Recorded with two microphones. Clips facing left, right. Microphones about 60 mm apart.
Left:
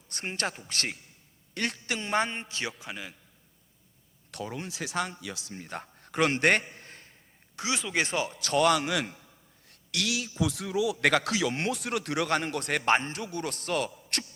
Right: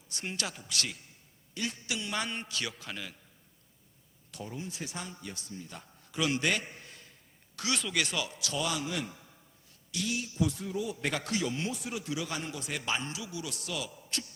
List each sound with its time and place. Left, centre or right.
0.1 s speech: left
1.5 s a man's voice: left
2.0 s a man's voice: left; by 3.2 s centre
4.3 s speech: left
5.5 s a man's voice: left
7.5 s speech: left
8.4 s a man's voice: left